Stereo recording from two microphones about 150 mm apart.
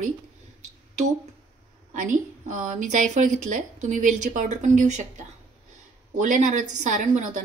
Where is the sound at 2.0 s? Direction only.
55° right (ahead or behind).